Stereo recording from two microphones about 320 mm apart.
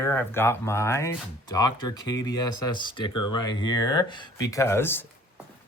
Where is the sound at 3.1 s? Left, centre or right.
Left.